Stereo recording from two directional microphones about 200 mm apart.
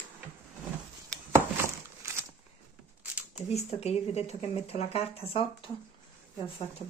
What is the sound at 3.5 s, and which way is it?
Speech, 30° left (ahead or behind).